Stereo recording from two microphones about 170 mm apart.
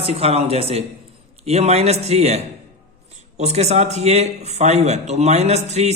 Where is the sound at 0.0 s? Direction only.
35° right (ahead or behind).